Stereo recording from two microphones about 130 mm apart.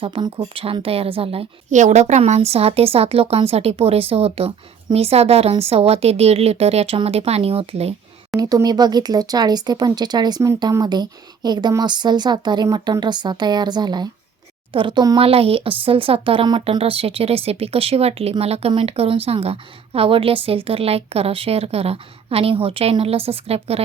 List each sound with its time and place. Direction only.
0.0 s a woman's voice: 40° right (ahead or behind)
1.7 s a woman's voice: 65° right (ahead or behind)
8.4 s speech: 30° right (ahead or behind)
15.2 s a woman's voice: 45° right (ahead or behind)